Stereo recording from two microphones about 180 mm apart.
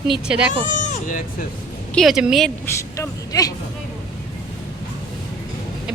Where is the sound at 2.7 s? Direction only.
15° left (ahead or behind).